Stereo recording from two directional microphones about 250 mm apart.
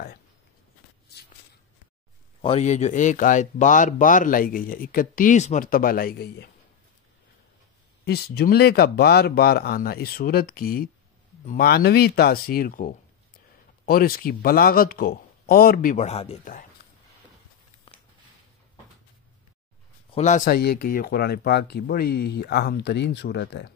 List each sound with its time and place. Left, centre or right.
2.4 s speech: left
8.0 s speech: left
20.1 s speech: left